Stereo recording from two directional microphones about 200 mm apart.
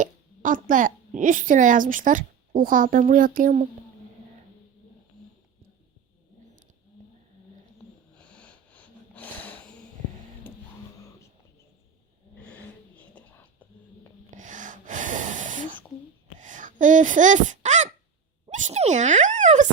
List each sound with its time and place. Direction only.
0.0 s a woman's voice: 40° right (ahead or behind)
8.3 s snort: 5° left (ahead or behind)
13.0 s whispering: 10° left (ahead or behind)
14.3 s snort: 40° right (ahead or behind)
16.4 s speech: 40° right (ahead or behind)